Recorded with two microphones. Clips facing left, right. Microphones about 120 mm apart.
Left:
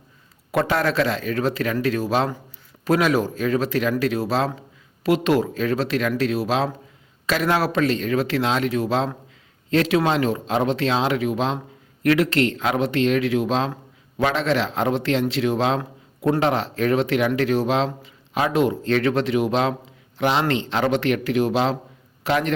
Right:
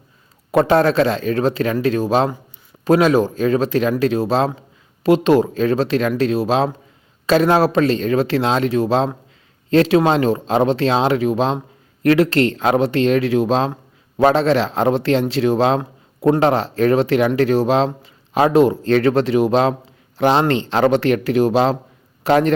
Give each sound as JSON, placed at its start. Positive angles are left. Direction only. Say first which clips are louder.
{"t": 0.5, "sound": "a man's voice", "louder": "right 7 dB", "side_deg": -30}